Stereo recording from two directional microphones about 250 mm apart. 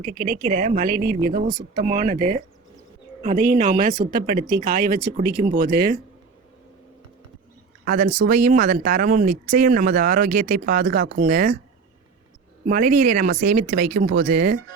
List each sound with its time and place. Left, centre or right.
0.0 s speech: right
7.9 s speech: right
12.6 s speech: right
13.4 s speech: right
13.9 s speech: right
14.3 s speech: right